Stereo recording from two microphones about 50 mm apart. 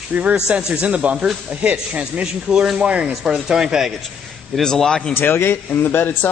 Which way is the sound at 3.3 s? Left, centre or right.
Centre.